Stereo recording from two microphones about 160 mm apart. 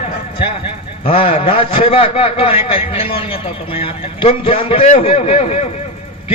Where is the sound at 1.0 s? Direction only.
35° left (ahead or behind).